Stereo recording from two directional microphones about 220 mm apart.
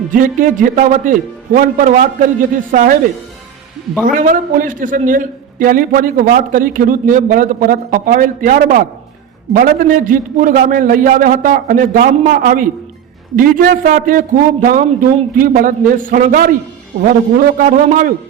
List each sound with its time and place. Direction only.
0.1 s a man's voice: 40° right (ahead or behind)
4.0 s a man's voice: 40° right (ahead or behind)